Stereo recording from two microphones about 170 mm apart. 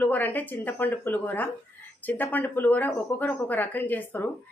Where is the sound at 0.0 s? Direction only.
10° left (ahead or behind).